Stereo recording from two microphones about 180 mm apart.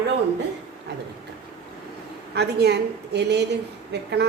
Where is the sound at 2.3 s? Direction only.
70° right (ahead or behind).